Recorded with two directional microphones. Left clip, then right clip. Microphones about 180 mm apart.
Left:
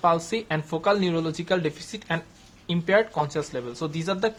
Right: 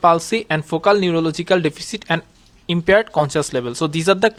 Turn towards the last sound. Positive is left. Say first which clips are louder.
# right 11 dB
turn(degrees=-55)  # may be behind; listen again after turning